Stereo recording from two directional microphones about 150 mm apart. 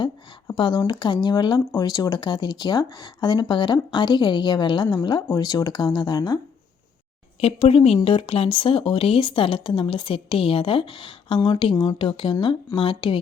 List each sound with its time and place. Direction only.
0.5 s speech: 30° left (ahead or behind)
7.4 s speech: 40° left (ahead or behind)